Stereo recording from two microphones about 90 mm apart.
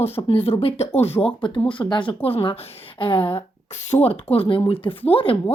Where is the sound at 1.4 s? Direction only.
60° left (ahead or behind); by 3.4 s 80° left.